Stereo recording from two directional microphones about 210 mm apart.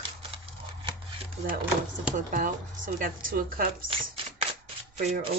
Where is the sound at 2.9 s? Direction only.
40° right (ahead or behind).